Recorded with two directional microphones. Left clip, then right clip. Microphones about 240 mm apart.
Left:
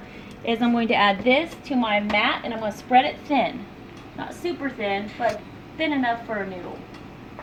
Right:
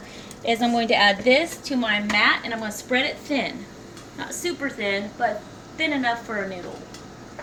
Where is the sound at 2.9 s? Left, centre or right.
Centre.